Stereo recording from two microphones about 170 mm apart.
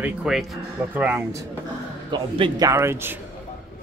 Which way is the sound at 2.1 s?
30° right (ahead or behind).